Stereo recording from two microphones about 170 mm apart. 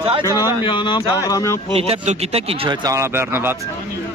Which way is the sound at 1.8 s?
35° right (ahead or behind).